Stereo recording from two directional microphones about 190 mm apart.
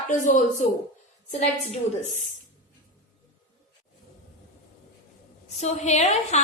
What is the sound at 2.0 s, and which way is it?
Speech, 40° left (ahead or behind).